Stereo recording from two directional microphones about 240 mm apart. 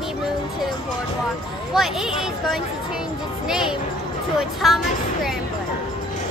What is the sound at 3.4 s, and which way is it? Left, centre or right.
Speech, centre.